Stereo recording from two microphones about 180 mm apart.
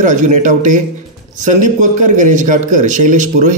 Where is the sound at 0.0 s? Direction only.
45° right (ahead or behind).